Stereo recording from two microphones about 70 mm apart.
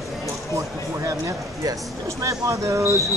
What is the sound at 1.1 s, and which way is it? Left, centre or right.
Speech, right.